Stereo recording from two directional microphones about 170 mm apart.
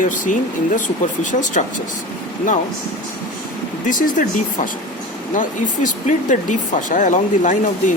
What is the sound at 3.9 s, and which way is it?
Speech, 50° left (ahead or behind).